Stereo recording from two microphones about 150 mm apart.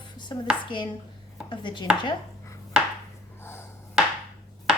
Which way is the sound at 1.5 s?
30° left (ahead or behind).